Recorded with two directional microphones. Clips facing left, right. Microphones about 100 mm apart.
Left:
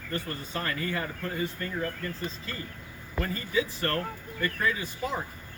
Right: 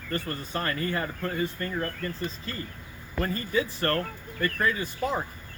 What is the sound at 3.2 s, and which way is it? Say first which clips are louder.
Speech: right 2 dB; 45° right (ahead or behind).